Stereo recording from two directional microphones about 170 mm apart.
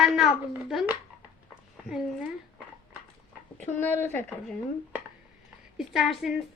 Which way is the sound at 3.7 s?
10° left (ahead or behind).